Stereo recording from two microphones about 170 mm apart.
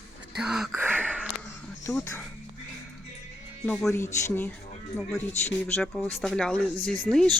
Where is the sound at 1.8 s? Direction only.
15° left (ahead or behind).